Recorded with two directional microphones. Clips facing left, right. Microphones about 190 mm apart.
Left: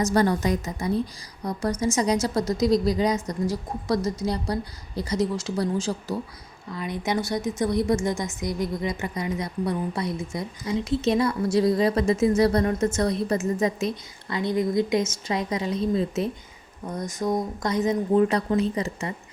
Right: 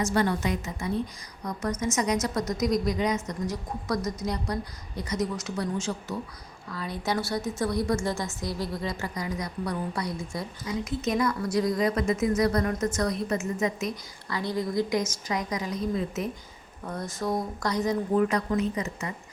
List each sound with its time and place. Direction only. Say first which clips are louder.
0.0 s a woman's voice: left 4 dB; 40° left (ahead or behind)
6.7 s a woman's voice: left 3 dB; 20° left (ahead or behind)
16.8 s a woman's voice: left 3 dB; 20° left (ahead or behind)